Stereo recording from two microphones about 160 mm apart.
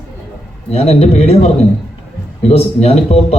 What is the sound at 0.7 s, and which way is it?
A man's voice, 40° left (ahead or behind).